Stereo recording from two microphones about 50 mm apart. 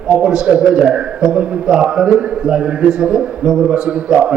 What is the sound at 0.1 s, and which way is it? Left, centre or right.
A man's voice, centre.